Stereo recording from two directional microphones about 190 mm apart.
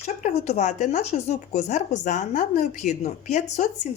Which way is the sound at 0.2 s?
35° left (ahead or behind).